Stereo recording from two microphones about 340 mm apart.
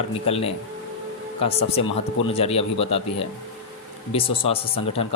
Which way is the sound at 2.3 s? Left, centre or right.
Centre.